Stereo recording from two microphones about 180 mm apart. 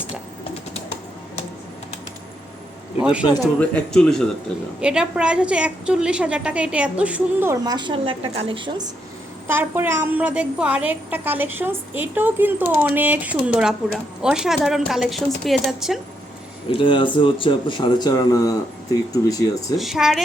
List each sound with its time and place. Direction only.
3.0 s speech: 5° right (ahead or behind)
3.4 s a woman's voice: 5° left (ahead or behind); by 8.7 s 30° right (ahead or behind)
9.5 s a woman's voice: 10° right (ahead or behind)
16.6 s speech: 30° left (ahead or behind)
19.7 s speech: centre (ahead or behind)